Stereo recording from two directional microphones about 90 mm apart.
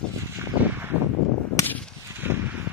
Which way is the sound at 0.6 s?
25° right (ahead or behind).